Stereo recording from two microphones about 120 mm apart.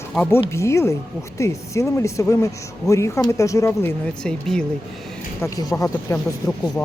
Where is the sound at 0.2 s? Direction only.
20° left (ahead or behind).